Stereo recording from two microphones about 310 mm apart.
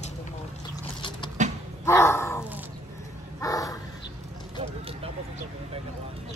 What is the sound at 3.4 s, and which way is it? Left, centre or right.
Dog, centre.